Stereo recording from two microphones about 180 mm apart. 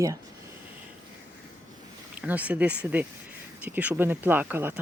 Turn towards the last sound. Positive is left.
turn(degrees=-10)  # may be behind; listen again after turning